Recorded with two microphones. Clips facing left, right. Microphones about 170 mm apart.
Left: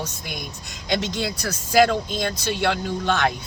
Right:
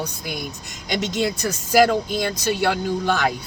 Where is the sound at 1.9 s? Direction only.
10° right (ahead or behind).